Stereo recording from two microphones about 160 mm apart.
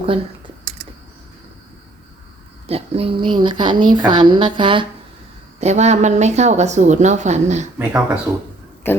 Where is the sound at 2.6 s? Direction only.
40° right (ahead or behind).